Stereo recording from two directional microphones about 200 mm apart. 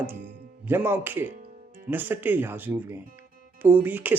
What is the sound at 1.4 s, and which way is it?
Music, 45° right (ahead or behind).